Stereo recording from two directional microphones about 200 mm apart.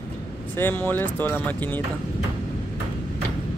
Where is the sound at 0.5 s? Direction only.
10° left (ahead or behind).